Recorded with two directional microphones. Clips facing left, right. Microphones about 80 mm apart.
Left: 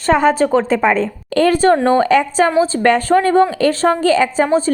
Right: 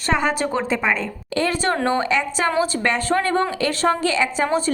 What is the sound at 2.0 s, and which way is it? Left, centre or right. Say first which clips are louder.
A woman's voice: left 8 dB; left.